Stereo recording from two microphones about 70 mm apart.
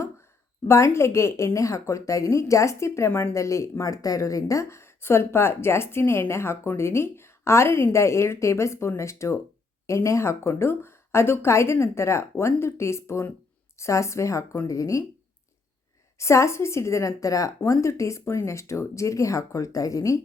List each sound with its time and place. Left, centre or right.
0.7 s speech: left
16.1 s speech: left
17.6 s speech: left